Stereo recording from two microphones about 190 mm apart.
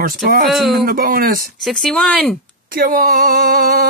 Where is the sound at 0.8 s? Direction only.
50° right (ahead or behind).